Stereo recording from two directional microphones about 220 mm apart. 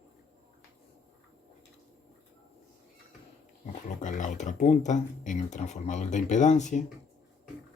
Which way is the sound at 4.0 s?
35° left (ahead or behind).